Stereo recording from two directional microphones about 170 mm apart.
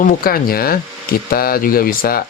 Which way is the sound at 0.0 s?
55° left (ahead or behind).